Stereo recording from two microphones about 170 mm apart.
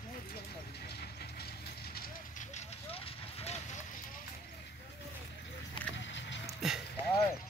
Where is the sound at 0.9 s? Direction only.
70° left (ahead or behind).